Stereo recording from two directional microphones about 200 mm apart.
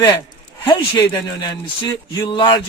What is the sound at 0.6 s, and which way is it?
Speech, 25° left (ahead or behind).